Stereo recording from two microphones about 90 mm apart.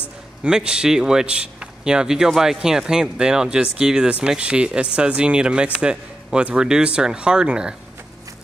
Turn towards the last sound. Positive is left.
turn(degrees=-10)  # may be behind; listen again after turning